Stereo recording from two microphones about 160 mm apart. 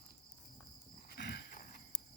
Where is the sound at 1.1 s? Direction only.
85° left; by 1.8 s 60° left (ahead or behind).